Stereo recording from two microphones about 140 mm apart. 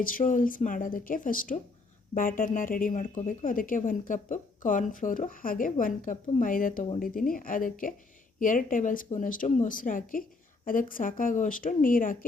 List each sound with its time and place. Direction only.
0.0 s a woman's voice: 75° left (ahead or behind)
7.0 s a woman's voice: 90° left